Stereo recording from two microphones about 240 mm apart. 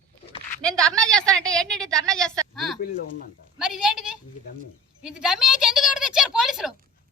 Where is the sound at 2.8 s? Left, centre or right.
Left.